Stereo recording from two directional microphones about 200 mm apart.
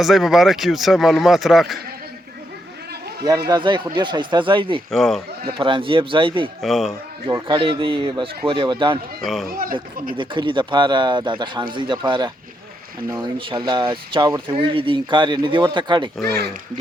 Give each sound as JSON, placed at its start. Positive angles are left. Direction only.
{"t": 0.0, "sound": "a man's voice", "side_deg": 0}
{"t": 3.5, "sound": "speech", "side_deg": -25}
{"t": 4.9, "sound": "a man's voice", "side_deg": 0}
{"t": 5.5, "sound": "speech", "side_deg": -25}
{"t": 6.6, "sound": "a man's voice", "side_deg": 0}
{"t": 7.4, "sound": "speech", "side_deg": -25}
{"t": 9.2, "sound": "a man's voice", "side_deg": 0}
{"t": 9.5, "sound": "speech", "side_deg": -45}
{"t": 10.2, "sound": "speech", "side_deg": -25}